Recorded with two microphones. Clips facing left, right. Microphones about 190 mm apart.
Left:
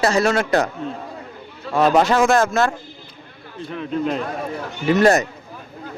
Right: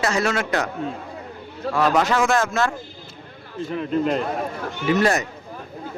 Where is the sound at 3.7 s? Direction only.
Centre (ahead or behind).